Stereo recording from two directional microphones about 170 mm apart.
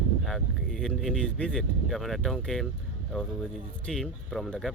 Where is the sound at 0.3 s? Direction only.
Centre (ahead or behind).